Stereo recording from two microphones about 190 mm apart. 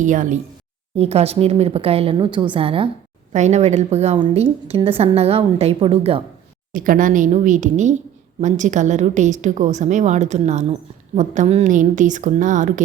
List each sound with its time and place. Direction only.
0.0 s a woman's voice: 40° right (ahead or behind)
6.7 s a woman's voice: 45° right (ahead or behind)